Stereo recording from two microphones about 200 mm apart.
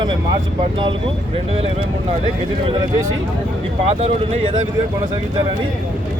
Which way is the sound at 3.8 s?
30° right (ahead or behind).